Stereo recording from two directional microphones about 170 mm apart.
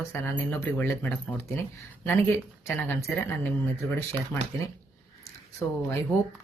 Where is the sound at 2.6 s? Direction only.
15° left (ahead or behind).